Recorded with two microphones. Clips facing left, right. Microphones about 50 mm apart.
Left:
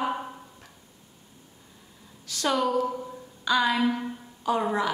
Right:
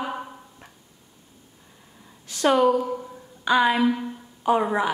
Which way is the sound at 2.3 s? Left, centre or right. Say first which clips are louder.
Right 7 dB; right.